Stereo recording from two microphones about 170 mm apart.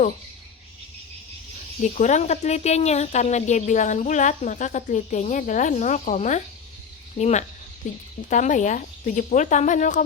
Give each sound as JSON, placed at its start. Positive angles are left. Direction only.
{"t": 1.8, "sound": "speech", "side_deg": 45}